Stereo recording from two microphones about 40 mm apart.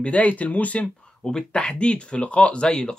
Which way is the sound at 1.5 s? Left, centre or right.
Left.